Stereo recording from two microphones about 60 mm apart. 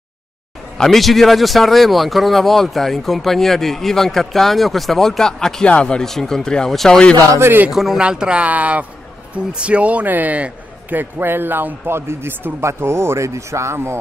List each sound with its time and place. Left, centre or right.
0.7 s a man's voice: centre
8.0 s a man's voice: centre; by 13.9 s right